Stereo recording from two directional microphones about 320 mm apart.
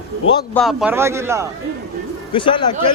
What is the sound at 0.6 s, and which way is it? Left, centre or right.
Speech, centre.